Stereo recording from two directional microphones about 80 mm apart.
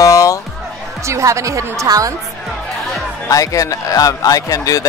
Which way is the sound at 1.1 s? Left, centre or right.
Right.